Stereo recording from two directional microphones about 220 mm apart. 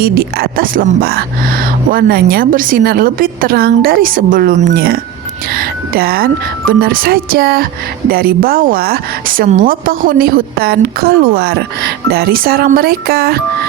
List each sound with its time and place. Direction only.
0.0 s a woman's voice: 45° right (ahead or behind)